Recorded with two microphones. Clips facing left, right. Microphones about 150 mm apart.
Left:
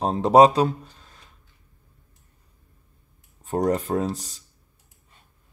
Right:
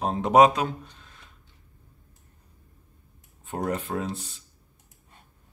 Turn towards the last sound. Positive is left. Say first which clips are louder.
# left 5 dB
turn(degrees=40)  # may be behind; listen again after turning